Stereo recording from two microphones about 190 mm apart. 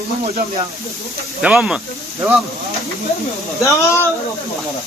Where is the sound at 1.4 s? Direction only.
5° right (ahead or behind).